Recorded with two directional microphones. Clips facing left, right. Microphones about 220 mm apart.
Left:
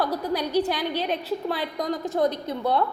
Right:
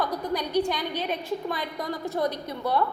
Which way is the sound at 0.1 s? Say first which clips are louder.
Left 2 dB; 5° left (ahead or behind).